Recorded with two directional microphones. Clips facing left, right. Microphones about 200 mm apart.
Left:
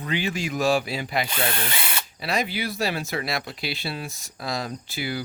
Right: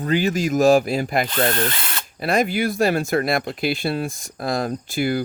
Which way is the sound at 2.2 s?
50° right (ahead or behind).